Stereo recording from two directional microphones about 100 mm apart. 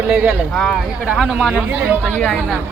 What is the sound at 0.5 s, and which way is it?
Speech, 5° left (ahead or behind).